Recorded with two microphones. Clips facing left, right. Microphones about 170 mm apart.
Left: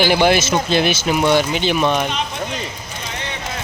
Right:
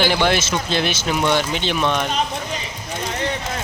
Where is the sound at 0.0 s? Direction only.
10° left (ahead or behind).